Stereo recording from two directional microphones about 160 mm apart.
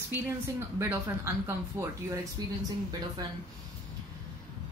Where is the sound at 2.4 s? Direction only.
25° right (ahead or behind).